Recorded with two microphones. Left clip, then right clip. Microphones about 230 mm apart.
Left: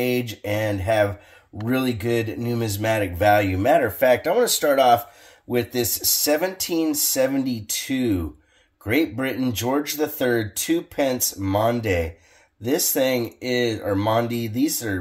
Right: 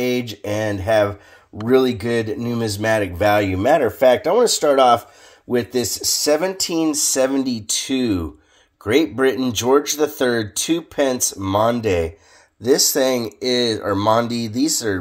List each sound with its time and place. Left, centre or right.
0.0 s speech: right
12.6 s speech: centre
13.0 s speech: right
14.3 s speech: centre